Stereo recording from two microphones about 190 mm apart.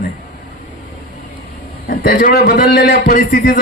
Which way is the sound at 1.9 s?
50° left (ahead or behind).